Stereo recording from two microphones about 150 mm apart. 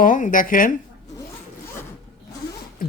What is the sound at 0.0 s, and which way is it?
Speech, 60° left (ahead or behind).